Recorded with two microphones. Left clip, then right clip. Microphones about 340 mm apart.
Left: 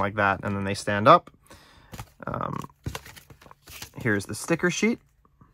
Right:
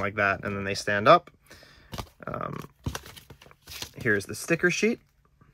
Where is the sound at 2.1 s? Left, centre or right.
Left.